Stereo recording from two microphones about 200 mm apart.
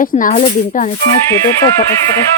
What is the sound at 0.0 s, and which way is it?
Speech, 40° left (ahead or behind).